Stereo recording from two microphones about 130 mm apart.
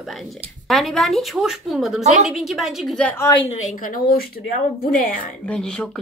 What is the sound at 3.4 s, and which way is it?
Speech, 55° left (ahead or behind).